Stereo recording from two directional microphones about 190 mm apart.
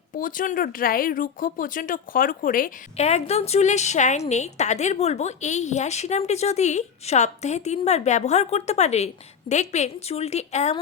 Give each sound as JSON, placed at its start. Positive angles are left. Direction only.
{"t": 0.1, "sound": "speech", "side_deg": 45}